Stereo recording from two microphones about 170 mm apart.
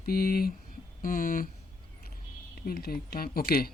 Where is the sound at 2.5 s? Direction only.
60° left (ahead or behind).